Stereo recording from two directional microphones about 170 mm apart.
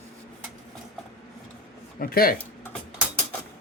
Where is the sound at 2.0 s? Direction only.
60° left (ahead or behind).